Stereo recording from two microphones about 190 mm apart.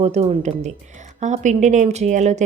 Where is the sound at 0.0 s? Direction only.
35° right (ahead or behind).